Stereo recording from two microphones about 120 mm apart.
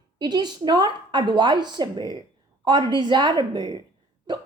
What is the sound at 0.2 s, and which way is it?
A woman's voice, 35° right (ahead or behind).